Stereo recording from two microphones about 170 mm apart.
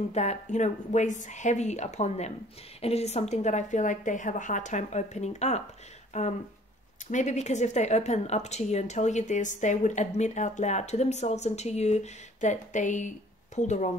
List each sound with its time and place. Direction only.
0.1 s speech: 40° left (ahead or behind)